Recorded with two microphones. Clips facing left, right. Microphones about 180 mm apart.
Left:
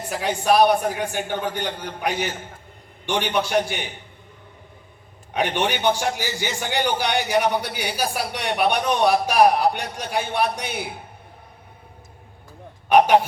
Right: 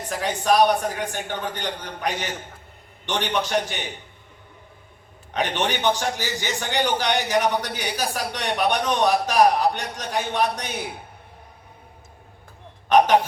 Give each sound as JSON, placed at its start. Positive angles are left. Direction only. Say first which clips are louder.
{"t": 0.1, "sound": "a man's voice", "louder": "left 1 dB", "side_deg": 10}
{"t": 5.3, "sound": "a man's voice", "louder": "left 2 dB", "side_deg": 10}
{"t": 12.9, "sound": "a sound", "louder": "left 1 dB", "side_deg": 10}